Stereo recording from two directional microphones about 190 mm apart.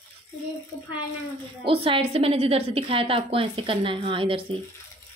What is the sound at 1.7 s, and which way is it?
A woman's voice, 30° right (ahead or behind).